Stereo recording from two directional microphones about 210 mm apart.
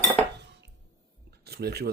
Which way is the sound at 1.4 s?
50° right (ahead or behind).